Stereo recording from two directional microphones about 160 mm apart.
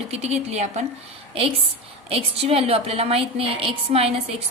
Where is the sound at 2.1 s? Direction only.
35° right (ahead or behind).